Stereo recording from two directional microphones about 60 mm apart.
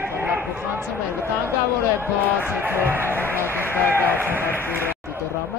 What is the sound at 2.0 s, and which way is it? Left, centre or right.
Speech, right.